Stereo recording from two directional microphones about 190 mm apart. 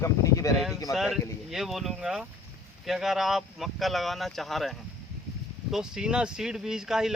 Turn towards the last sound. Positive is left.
turn(degrees=-5)  # may be behind; listen again after turning